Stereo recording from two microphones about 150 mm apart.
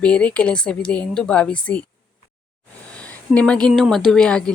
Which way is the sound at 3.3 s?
5° left (ahead or behind).